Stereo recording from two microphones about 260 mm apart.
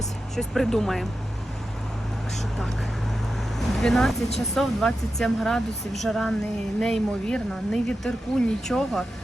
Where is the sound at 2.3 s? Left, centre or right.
Centre.